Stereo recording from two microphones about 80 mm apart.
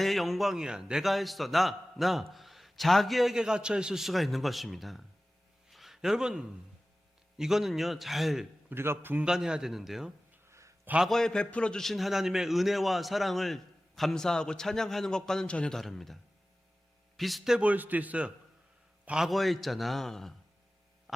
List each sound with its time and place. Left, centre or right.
0.0 s a man's voice: centre
5.7 s a sound: centre
7.3 s a man's voice: centre
8.7 s a man's voice: right
9.2 s a man's voice: centre
10.5 s a sound: right
11.0 s a man's voice: centre
17.2 s a man's voice: centre
17.6 s a man's voice: centre
19.0 s a man's voice: centre